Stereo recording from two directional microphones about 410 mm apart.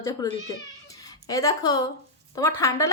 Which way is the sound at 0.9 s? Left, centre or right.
Centre.